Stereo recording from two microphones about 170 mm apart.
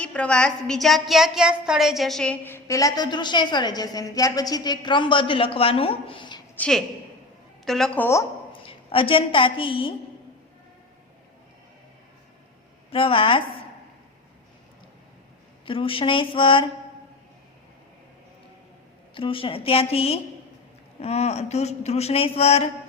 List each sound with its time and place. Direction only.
0.0 s a woman's voice: 5° left (ahead or behind); by 6.4 s 30° left (ahead or behind)
6.6 s a woman's voice: 5° left (ahead or behind)
8.6 s a woman's voice: 30° left (ahead or behind)
12.9 s speech: 30° left (ahead or behind)
15.6 s speech: 30° left (ahead or behind)
19.1 s speech: 30° left (ahead or behind)